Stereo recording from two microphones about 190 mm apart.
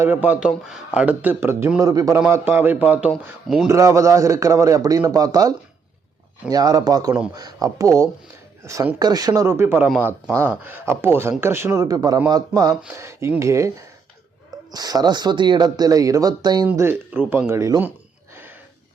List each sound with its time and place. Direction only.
0.0 s speech: 10° right (ahead or behind)
3.7 s speech: 15° right (ahead or behind)
14.7 s speech: 20° right (ahead or behind)